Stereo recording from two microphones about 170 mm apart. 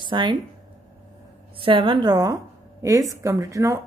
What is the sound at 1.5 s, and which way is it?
A woman's voice, 30° right (ahead or behind).